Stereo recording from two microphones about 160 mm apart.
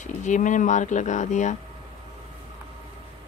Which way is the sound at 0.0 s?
50° left (ahead or behind).